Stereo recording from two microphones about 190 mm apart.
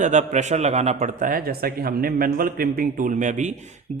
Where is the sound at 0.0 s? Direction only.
40° right (ahead or behind).